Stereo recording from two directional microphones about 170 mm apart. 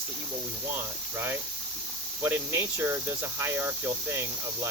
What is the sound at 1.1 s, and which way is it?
Speech, 15° right (ahead or behind).